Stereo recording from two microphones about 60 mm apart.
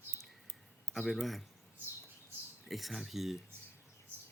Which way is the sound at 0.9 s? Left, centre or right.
Left.